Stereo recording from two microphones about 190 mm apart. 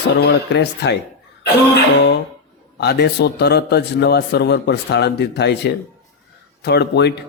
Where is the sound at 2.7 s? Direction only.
60° left (ahead or behind).